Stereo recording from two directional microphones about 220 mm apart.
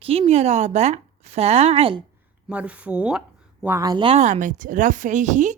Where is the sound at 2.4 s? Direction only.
5° right (ahead or behind).